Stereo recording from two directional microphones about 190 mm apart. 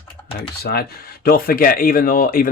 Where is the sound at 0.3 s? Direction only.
55° left (ahead or behind).